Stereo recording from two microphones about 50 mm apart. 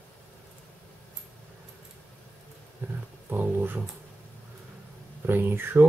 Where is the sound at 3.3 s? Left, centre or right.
Right.